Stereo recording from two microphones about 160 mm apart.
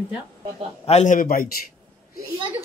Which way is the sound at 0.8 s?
45° left (ahead or behind).